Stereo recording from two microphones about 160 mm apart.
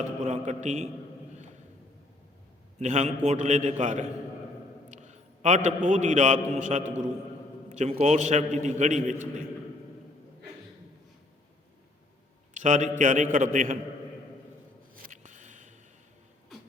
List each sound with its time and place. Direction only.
0.3 s a man's voice: 45° right (ahead or behind)
2.7 s a man's voice: 45° right (ahead or behind)
12.5 s a man's voice: 50° right (ahead or behind)
15.0 s a sound: 50° right (ahead or behind)